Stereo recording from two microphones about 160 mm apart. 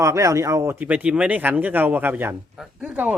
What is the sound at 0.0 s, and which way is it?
Speech, 20° right (ahead or behind).